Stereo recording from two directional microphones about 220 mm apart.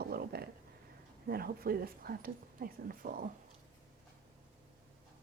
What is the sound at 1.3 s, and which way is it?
Speech, 45° right (ahead or behind).